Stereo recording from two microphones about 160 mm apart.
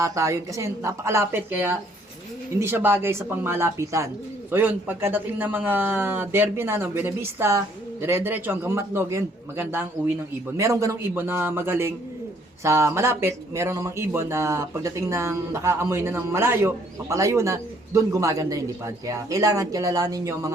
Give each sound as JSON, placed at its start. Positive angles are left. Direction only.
{"t": 0.0, "sound": "speech", "side_deg": -20}